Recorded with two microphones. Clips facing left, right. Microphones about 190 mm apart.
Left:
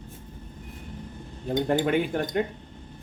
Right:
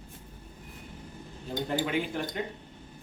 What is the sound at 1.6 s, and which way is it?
Speech, 55° left (ahead or behind).